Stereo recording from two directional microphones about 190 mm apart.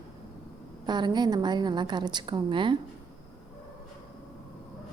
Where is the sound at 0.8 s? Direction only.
25° right (ahead or behind).